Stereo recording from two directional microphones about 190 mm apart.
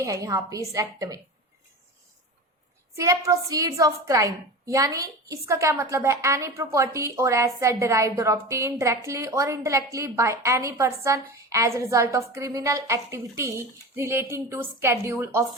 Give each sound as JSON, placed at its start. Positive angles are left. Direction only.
{"t": 0.0, "sound": "a woman's voice", "side_deg": -20}
{"t": 2.9, "sound": "a woman's voice", "side_deg": -15}